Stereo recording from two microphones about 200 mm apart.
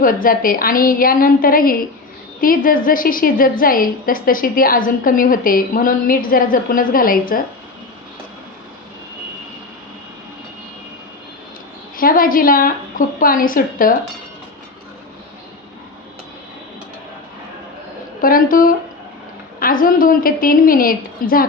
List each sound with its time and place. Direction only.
0.0 s a woman's voice: 45° left (ahead or behind)
11.9 s a woman's voice: 45° left (ahead or behind)
18.2 s a woman's voice: 45° left (ahead or behind)